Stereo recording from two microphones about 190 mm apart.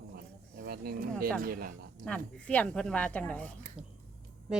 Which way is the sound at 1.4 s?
50° right (ahead or behind).